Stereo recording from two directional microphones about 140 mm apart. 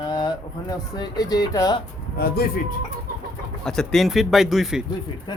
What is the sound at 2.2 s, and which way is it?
Speech, 90° left.